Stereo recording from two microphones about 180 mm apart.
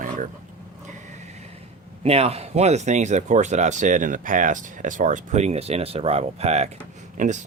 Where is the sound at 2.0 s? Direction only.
35° right (ahead or behind).